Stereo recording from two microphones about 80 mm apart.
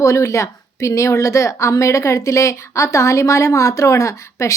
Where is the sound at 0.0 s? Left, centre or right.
Left.